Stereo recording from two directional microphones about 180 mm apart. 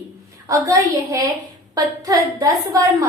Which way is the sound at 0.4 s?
20° right (ahead or behind).